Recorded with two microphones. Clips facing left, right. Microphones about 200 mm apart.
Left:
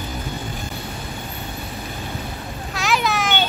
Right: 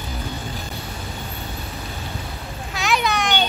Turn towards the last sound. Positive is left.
turn(degrees=0)  # may be behind; listen again after turning